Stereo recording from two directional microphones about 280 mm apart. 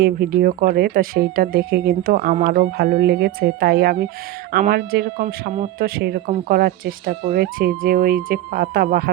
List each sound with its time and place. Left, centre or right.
0.0 s speech: right